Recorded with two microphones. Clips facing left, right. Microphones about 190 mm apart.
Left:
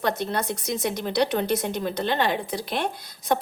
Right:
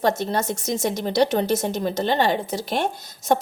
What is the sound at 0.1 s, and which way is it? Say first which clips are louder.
Speech: right 3 dB; 45° right (ahead or behind).